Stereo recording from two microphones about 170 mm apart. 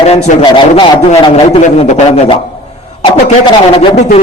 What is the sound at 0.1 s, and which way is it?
A man's voice, 35° left (ahead or behind).